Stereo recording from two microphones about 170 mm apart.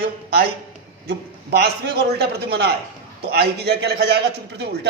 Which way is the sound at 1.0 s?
70° right (ahead or behind).